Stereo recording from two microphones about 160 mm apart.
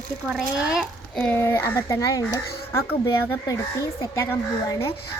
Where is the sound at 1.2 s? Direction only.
10° left (ahead or behind).